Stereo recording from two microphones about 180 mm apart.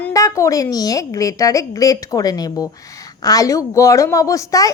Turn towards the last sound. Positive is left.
turn(degrees=20)  # may be behind; listen again after turning